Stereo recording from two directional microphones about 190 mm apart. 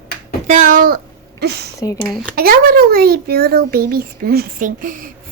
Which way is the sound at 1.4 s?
60° right (ahead or behind).